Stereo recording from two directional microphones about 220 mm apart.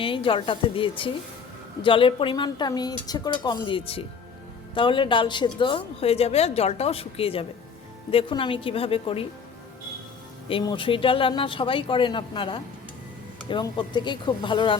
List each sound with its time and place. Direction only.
0.0 s a woman's voice: 25° left (ahead or behind)
10.5 s a woman's voice: 20° left (ahead or behind)